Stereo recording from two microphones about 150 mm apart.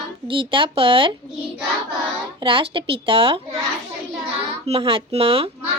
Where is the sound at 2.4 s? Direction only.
35° right (ahead or behind).